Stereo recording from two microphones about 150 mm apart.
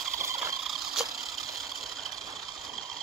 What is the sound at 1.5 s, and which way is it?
Engine, centre (ahead or behind).